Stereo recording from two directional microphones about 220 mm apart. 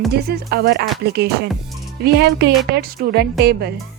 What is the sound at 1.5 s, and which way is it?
Music, centre (ahead or behind).